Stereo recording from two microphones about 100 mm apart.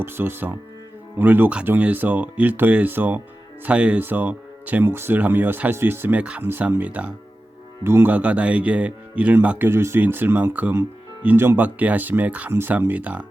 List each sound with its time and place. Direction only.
0.0 s speech: 20° right (ahead or behind)